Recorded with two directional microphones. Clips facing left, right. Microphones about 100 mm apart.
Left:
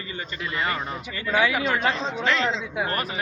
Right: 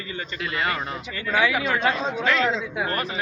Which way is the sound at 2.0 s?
10° right (ahead or behind).